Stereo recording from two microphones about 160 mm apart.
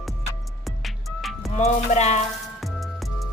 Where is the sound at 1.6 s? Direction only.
45° left (ahead or behind).